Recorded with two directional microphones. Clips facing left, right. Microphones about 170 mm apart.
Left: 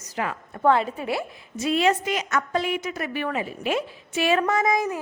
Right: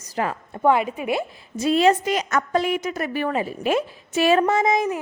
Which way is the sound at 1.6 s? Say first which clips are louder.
Right 4 dB; 35° right (ahead or behind).